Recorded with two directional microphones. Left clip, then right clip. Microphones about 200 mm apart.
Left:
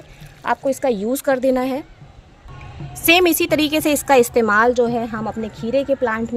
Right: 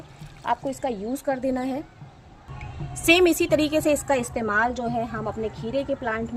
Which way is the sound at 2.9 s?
35° left (ahead or behind).